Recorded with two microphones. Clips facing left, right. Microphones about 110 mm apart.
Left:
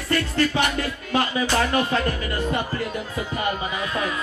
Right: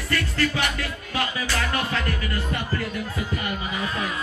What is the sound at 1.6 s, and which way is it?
Speech, 30° left (ahead or behind).